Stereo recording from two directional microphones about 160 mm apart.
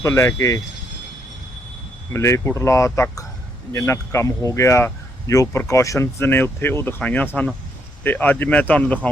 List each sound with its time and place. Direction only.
0.0 s speech: 15° left (ahead or behind)
2.1 s speech: 15° left (ahead or behind)